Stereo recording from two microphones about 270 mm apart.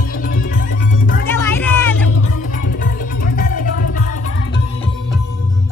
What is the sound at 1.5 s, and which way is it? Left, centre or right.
Music, centre.